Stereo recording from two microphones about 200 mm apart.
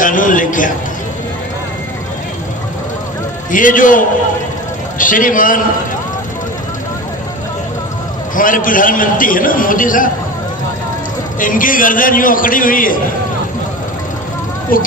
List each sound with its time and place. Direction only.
0.0 s a man's voice: 40° left (ahead or behind)
3.5 s a man's voice: 40° left (ahead or behind)
8.4 s a man's voice: 45° left (ahead or behind)
11.3 s a man's voice: 40° left (ahead or behind)
14.7 s a man's voice: 45° left (ahead or behind)